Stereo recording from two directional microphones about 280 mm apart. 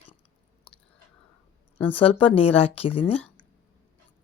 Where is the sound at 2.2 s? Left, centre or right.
Left.